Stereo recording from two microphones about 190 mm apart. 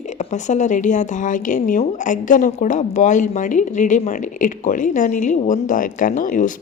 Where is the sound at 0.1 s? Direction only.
40° left (ahead or behind).